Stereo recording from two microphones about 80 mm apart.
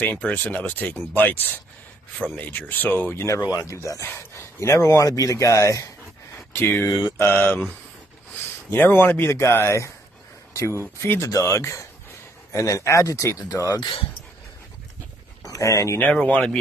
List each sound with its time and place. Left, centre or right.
0.0 s speech: centre
3.4 s speech: left
6.3 s a sound: left
6.9 s mantra: left
7.2 s speech: left
11.0 s speech: left
15.4 s speech: left
16.0 s speech: centre